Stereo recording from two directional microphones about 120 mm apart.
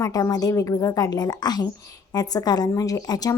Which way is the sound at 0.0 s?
30° left (ahead or behind).